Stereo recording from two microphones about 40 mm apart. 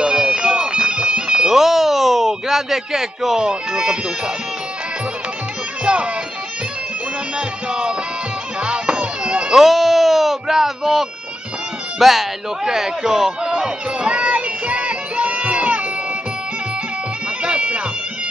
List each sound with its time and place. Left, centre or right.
0.0 s bagpipes: centre
1.5 s speech: centre
5.9 s music: right
7.3 s music: right
8.5 s bagpipes: right
9.6 s a sound: centre
12.0 s speech: centre
12.6 s a sound: centre; by 15.8 s right
17.4 s bagpipes: right